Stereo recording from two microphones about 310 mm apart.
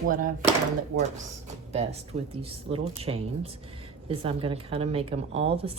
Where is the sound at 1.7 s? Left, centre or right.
Centre.